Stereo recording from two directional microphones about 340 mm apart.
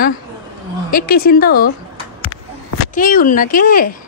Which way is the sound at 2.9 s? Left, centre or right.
Left.